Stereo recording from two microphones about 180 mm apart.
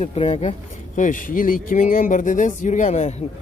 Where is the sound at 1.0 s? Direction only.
50° left (ahead or behind).